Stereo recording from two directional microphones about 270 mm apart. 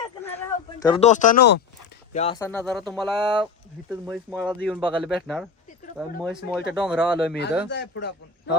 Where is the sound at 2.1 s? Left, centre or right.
Left.